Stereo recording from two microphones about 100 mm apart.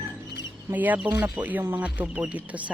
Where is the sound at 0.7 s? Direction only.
15° right (ahead or behind).